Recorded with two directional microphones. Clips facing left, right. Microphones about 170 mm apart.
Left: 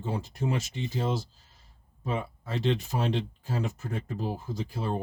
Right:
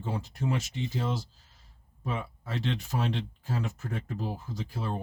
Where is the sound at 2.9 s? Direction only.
25° left (ahead or behind).